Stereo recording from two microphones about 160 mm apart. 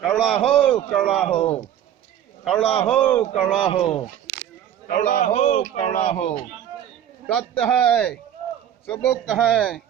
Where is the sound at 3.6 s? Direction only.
40° left (ahead or behind).